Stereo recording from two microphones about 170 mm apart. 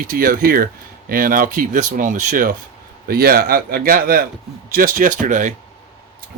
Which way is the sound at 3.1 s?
60° right (ahead or behind).